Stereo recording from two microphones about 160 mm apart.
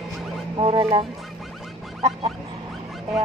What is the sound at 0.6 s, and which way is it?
Speech, 30° right (ahead or behind).